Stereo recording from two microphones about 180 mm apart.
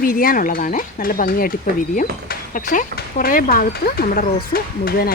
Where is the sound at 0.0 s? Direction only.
50° left (ahead or behind).